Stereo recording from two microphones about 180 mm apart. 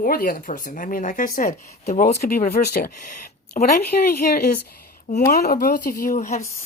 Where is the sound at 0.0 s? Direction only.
50° left (ahead or behind).